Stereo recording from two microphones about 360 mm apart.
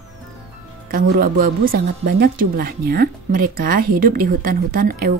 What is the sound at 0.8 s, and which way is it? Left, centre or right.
Speech, right.